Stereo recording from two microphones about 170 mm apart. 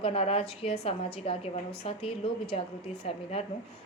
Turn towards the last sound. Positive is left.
turn(degrees=35)  # may be behind; listen again after turning